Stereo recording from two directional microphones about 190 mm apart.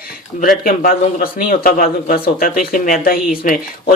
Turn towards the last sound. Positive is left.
turn(degrees=50)  # may be behind; listen again after turning